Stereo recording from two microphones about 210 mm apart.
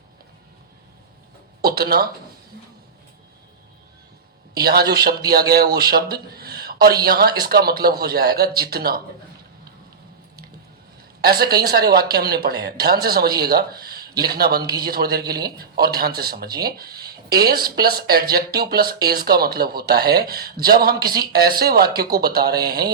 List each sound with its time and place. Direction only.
1.6 s a sound: 45° right (ahead or behind)
4.5 s speech: 45° right (ahead or behind)
11.2 s speech: 45° right (ahead or behind)